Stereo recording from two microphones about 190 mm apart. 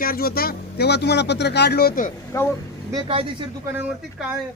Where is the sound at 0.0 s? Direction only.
50° left (ahead or behind).